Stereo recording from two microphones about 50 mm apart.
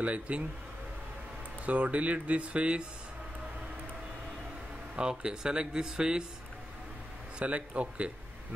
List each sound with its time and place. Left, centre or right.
0.0 s speech: right
1.7 s speech: right
4.9 s speech: centre
7.3 s speech: right